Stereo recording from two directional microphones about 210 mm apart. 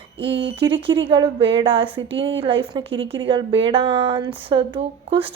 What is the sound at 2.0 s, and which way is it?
Speech, 60° right (ahead or behind).